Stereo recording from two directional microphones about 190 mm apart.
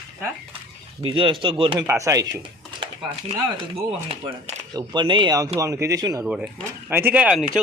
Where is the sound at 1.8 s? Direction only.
15° right (ahead or behind).